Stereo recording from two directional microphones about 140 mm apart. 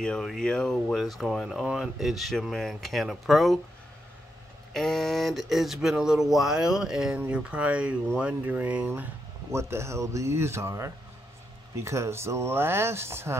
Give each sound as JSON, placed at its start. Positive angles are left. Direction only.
{"t": 0.0, "sound": "speech", "side_deg": 5}
{"t": 4.7, "sound": "speech", "side_deg": 5}